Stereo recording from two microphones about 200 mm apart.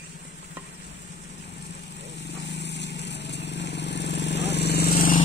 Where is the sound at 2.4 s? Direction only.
60° left (ahead or behind).